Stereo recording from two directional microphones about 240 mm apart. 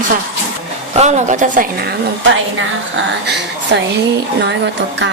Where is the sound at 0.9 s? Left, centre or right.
Right.